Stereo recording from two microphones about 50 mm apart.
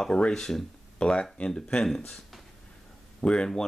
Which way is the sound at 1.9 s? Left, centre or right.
Centre.